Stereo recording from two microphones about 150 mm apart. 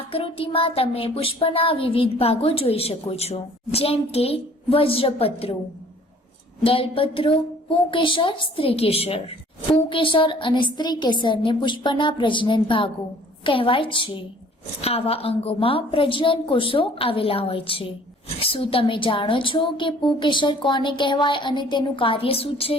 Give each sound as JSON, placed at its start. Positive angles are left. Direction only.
{"t": 0.1, "sound": "child singing", "side_deg": 40}
{"t": 6.6, "sound": "child singing", "side_deg": 40}